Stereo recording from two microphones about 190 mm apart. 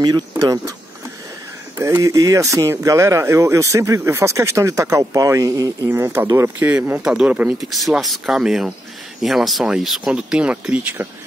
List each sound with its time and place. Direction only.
0.3 s speech: 15° right (ahead or behind)
1.8 s speech: 15° right (ahead or behind)